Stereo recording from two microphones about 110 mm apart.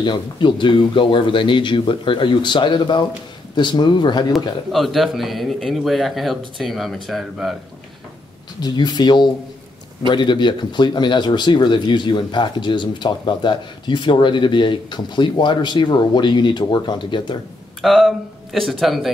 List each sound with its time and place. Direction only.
0.0 s a man's voice: 45° left (ahead or behind)
4.7 s speech: centre (ahead or behind)
8.5 s a man's voice: 40° left (ahead or behind)
17.8 s speech: centre (ahead or behind)